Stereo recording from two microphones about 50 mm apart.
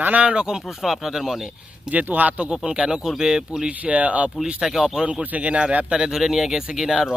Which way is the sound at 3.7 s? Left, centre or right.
Right.